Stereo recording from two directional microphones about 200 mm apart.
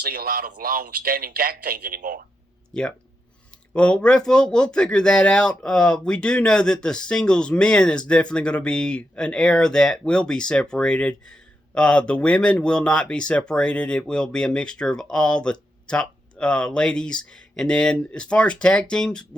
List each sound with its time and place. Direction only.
0.0 s a man's voice: 45° right (ahead or behind)
3.7 s speech: 5° left (ahead or behind)